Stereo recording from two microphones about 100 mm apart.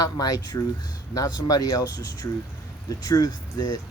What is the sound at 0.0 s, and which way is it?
Speech, 40° left (ahead or behind).